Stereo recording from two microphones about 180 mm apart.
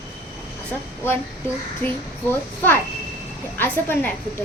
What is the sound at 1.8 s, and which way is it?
Speech, 10° left (ahead or behind).